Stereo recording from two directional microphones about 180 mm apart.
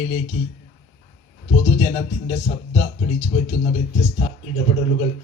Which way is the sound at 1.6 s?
40° left (ahead or behind).